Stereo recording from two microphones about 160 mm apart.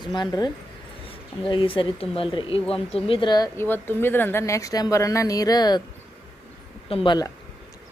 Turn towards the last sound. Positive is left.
turn(degrees=25)  # may be behind; listen again after turning